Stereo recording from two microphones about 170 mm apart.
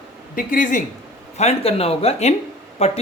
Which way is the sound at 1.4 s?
40° left (ahead or behind).